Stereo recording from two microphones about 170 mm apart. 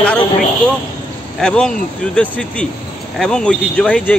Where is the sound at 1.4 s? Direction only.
5° left (ahead or behind).